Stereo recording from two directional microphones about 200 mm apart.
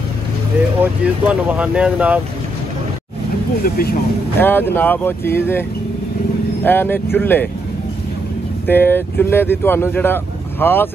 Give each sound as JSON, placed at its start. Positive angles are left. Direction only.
{"t": 0.7, "sound": "speech", "side_deg": -5}
{"t": 3.6, "sound": "speech", "side_deg": 45}
{"t": 4.4, "sound": "speech", "side_deg": 10}
{"t": 8.6, "sound": "speech", "side_deg": 10}